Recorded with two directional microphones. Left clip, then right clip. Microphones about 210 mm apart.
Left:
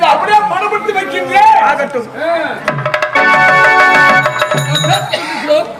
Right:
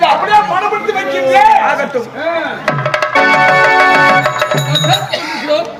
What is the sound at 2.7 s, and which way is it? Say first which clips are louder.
Music: right 1 dB; centre (ahead or behind).